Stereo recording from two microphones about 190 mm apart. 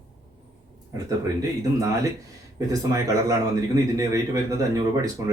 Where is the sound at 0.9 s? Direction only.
20° right (ahead or behind).